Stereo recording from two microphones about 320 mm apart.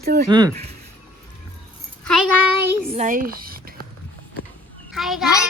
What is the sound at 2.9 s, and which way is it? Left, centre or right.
Speech, right.